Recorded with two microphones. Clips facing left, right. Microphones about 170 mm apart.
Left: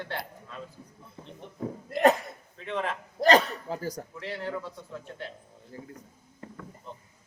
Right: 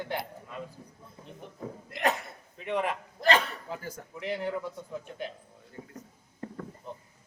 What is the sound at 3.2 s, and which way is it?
Speech, 40° left (ahead or behind).